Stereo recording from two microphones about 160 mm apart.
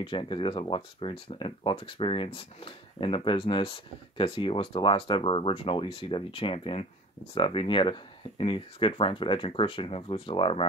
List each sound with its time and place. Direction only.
0.0 s speech: 30° left (ahead or behind)